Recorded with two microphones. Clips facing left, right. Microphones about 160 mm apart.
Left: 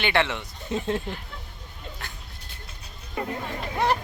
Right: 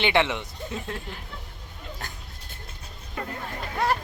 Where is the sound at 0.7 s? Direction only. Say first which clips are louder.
Left 7 dB; 25° left (ahead or behind).